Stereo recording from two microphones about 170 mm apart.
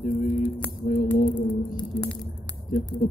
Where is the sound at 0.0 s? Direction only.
50° left (ahead or behind).